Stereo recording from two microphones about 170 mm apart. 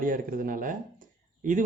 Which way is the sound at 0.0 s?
55° right (ahead or behind).